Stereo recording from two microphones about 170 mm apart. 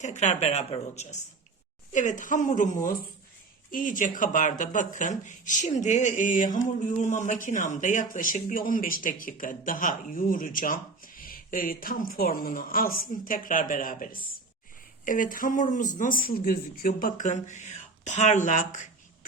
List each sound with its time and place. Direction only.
0.0 s speech: 45° left (ahead or behind)